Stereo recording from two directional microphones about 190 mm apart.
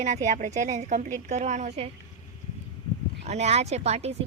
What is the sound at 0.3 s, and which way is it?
A woman's voice, 40° right (ahead or behind).